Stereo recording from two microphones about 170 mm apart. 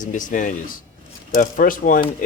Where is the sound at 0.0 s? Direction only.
50° left (ahead or behind).